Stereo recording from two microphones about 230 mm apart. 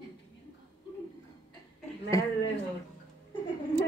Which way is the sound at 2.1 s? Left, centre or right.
Centre.